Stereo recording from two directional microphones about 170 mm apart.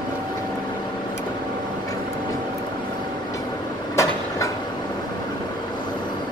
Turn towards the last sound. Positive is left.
turn(degrees=15)  # may be behind; listen again after turning